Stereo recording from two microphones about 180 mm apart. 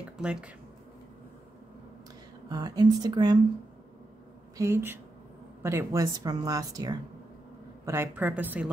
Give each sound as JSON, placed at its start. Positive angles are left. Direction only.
{"t": 0.0, "sound": "a sound", "side_deg": -5}
{"t": 2.5, "sound": "a woman's voice", "side_deg": -20}
{"t": 4.6, "sound": "a woman's voice", "side_deg": -15}